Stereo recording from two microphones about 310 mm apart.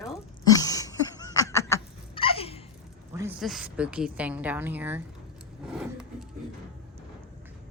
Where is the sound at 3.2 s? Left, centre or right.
Centre.